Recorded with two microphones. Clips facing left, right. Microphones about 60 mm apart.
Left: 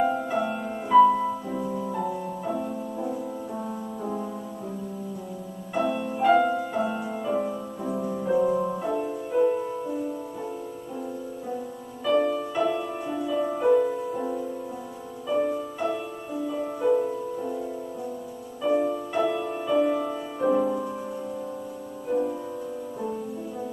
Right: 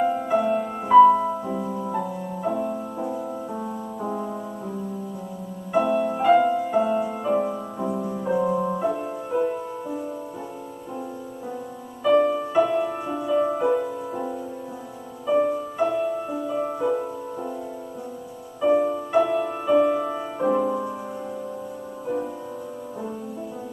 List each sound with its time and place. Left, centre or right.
0.0 s music: centre
5.7 s music: centre
6.2 s music: centre
7.2 s music: centre
7.9 s music: centre
12.0 s music: centre
18.6 s music: centre